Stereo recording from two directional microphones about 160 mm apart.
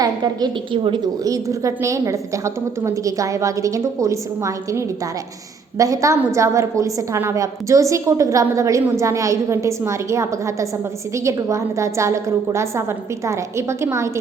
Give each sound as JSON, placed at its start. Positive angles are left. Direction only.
{"t": 0.0, "sound": "a woman's voice", "side_deg": -25}